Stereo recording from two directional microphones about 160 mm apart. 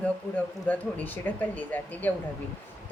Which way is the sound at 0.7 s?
10° left (ahead or behind).